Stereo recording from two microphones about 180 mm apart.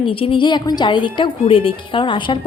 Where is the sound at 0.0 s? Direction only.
30° left (ahead or behind).